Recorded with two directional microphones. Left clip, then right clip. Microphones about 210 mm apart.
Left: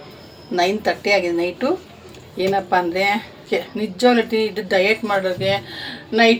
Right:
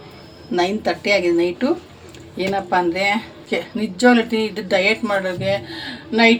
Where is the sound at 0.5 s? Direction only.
Centre (ahead or behind).